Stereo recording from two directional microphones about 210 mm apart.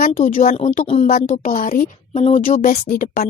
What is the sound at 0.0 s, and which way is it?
A woman's voice, 40° left (ahead or behind).